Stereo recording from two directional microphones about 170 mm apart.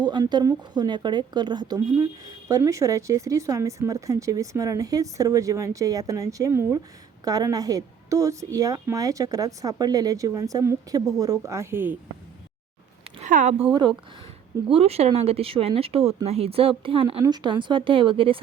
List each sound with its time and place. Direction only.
0.0 s a woman's voice: 25° right (ahead or behind)
13.2 s speech: 50° right (ahead or behind)
14.7 s speech: 35° right (ahead or behind)